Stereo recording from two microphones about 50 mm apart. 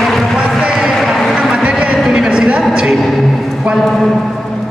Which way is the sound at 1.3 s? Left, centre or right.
Right.